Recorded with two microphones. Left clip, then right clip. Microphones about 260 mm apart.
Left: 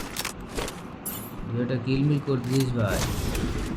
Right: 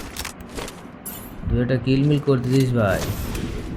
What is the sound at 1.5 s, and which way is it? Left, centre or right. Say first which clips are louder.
Speech: right 6 dB; centre.